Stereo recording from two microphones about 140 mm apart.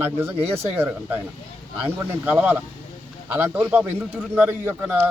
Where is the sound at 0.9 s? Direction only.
15° right (ahead or behind).